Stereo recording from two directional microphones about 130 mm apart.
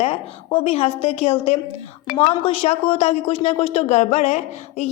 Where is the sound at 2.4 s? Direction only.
45° left (ahead or behind).